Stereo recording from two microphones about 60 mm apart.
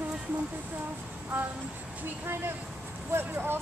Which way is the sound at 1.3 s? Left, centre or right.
Right.